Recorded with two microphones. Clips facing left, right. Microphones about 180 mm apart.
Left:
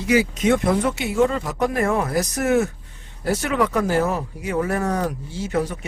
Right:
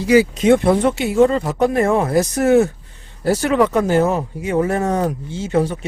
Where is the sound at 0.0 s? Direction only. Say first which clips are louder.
Right 5 dB; 30° right (ahead or behind).